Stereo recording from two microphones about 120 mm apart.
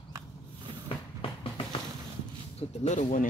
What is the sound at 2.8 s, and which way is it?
Speech, 75° left (ahead or behind).